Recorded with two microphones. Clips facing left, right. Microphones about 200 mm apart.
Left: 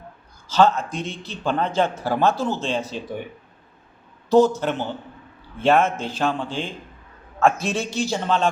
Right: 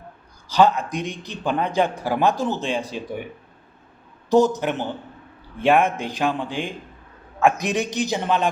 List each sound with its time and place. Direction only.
0.5 s a man's voice: 15° right (ahead or behind)
4.3 s a man's voice: 15° right (ahead or behind)